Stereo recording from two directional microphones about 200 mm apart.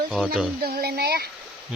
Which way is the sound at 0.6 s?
50° right (ahead or behind).